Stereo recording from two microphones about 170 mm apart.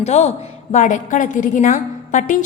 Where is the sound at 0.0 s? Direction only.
40° left (ahead or behind).